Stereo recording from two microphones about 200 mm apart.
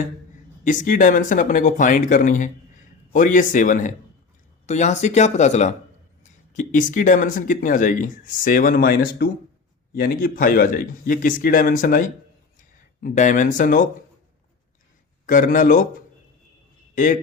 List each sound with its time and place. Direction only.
0.6 s speech: 40° left (ahead or behind)
15.3 s speech: 40° left (ahead or behind)
16.9 s a man's voice: 40° left (ahead or behind)